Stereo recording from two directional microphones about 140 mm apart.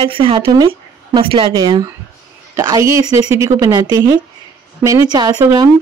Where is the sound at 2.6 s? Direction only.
25° right (ahead or behind).